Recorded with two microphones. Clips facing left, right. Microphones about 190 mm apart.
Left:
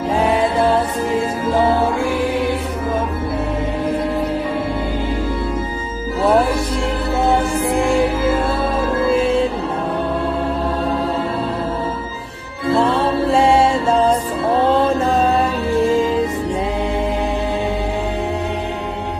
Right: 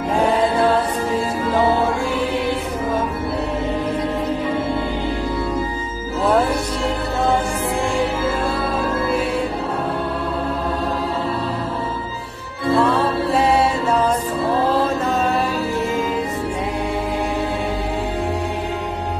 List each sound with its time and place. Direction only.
9.1 s music: 25° left (ahead or behind)
12.7 s music: 25° left (ahead or behind)